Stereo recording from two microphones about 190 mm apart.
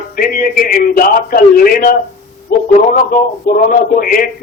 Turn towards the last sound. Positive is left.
turn(degrees=50)  # may be behind; listen again after turning